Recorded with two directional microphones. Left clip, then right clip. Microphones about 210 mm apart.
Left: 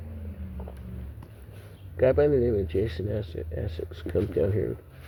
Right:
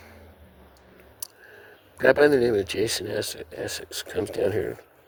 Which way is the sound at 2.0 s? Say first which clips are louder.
Right 4 dB; 55° right (ahead or behind).